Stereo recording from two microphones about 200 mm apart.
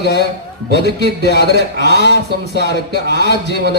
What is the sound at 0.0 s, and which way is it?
Speech, 60° left (ahead or behind).